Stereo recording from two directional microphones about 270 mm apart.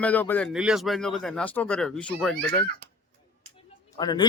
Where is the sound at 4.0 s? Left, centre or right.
Centre.